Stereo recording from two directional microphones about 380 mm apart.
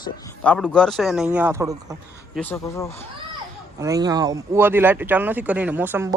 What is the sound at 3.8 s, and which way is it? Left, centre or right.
Speech, centre.